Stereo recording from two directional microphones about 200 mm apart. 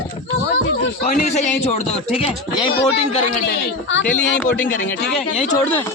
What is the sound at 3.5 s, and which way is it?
Speech, 60° left (ahead or behind).